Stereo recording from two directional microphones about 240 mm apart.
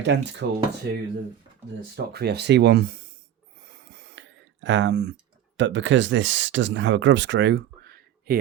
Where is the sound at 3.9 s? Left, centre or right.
Right.